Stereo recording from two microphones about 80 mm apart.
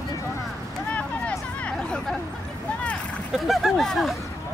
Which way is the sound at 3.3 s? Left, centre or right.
Centre.